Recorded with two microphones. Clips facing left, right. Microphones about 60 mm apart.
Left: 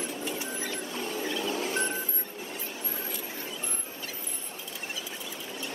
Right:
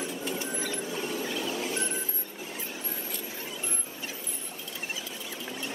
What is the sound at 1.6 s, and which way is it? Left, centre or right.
Music, left.